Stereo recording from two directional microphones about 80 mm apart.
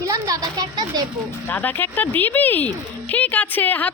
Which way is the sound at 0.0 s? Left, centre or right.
Right.